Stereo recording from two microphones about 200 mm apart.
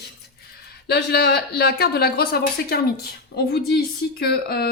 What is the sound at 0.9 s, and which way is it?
Speech, 55° left (ahead or behind).